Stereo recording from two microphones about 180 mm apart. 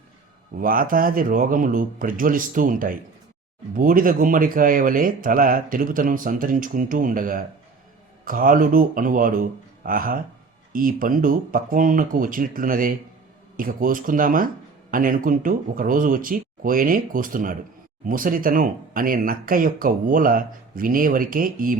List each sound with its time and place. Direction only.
0.6 s speech: 50° right (ahead or behind)